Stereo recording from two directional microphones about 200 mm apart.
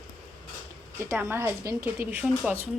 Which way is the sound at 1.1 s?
10° right (ahead or behind).